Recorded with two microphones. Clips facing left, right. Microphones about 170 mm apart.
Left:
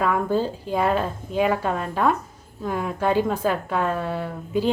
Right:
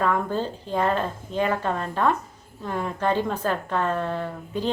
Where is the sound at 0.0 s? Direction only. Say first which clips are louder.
Left 2 dB; 10° left (ahead or behind).